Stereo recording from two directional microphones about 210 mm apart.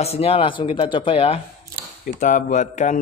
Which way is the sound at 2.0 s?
40° left (ahead or behind).